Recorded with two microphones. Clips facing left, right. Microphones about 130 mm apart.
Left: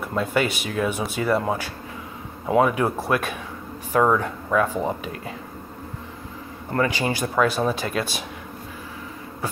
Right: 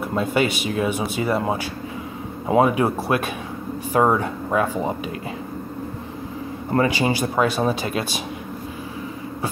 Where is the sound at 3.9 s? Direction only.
25° right (ahead or behind).